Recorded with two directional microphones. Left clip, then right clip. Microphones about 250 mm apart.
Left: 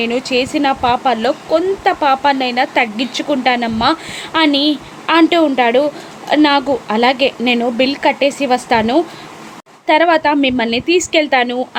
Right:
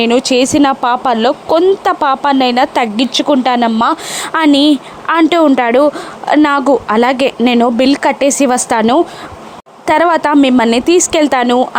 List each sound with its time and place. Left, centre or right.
0.0 s speech: right